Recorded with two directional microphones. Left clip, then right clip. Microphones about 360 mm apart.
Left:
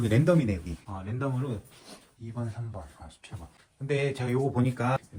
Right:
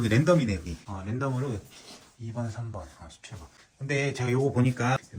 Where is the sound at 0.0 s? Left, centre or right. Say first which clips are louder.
Right 1 dB; centre.